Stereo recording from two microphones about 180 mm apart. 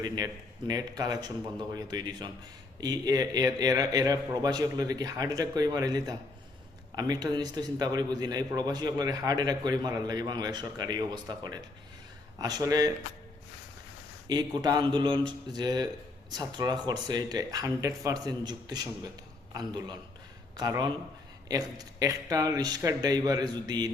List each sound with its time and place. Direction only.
0.7 s a man's voice: 20° right (ahead or behind)
14.3 s a man's voice: 25° right (ahead or behind)